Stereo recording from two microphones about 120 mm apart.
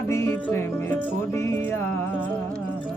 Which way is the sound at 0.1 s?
25° left (ahead or behind).